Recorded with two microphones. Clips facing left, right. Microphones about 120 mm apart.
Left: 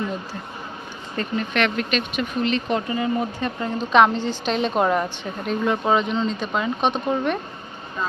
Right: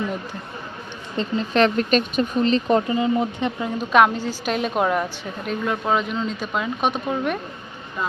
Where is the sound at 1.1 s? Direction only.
25° right (ahead or behind).